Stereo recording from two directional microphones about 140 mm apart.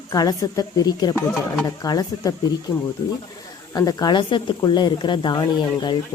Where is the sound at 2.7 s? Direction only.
15° left (ahead or behind).